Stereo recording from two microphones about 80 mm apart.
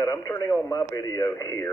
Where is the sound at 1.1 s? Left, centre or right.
Left.